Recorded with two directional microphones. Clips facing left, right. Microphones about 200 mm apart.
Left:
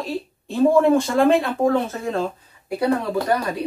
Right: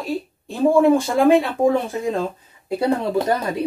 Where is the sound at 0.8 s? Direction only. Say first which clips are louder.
Right 4 dB; 5° right (ahead or behind); by 3.5 s 25° right (ahead or behind).